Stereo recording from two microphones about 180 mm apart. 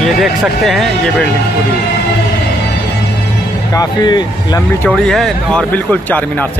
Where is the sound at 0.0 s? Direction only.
Centre (ahead or behind).